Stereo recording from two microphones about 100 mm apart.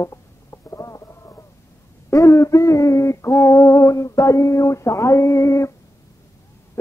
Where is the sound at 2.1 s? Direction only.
30° left (ahead or behind).